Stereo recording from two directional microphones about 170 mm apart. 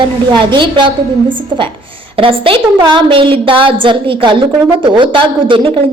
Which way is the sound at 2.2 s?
30° right (ahead or behind).